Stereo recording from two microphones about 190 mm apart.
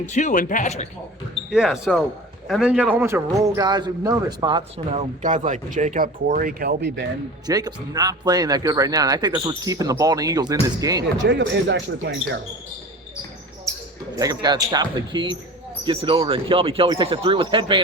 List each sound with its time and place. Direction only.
0.1 s speech: 40° left (ahead or behind)
1.5 s speech: centre (ahead or behind); by 5.0 s 25° right (ahead or behind)
5.2 s speech: 40° right (ahead or behind); by 7.1 s 65° right (ahead or behind)
7.4 s speech: 20° right (ahead or behind)
11.0 s speech: 70° right (ahead or behind)
14.2 s speech: 20° right (ahead or behind)